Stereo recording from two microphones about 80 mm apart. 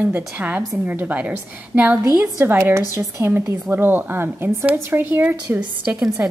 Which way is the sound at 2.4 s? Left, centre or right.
Right.